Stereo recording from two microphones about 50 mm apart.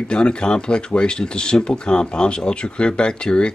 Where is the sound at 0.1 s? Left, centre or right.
Centre.